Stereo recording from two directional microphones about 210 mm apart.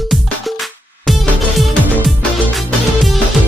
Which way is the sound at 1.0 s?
Centre (ahead or behind).